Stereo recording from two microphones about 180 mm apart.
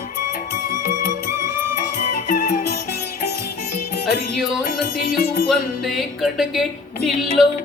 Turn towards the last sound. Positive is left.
turn(degrees=0)  # may be behind; listen again after turning